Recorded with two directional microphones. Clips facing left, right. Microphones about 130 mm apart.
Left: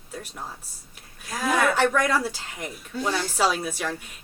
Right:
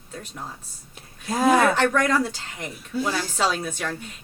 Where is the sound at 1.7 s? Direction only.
5° left (ahead or behind).